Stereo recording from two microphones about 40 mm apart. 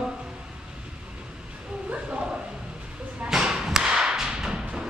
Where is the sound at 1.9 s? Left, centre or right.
Right.